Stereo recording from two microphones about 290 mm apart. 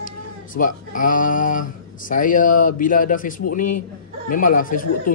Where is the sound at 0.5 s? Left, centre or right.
Left.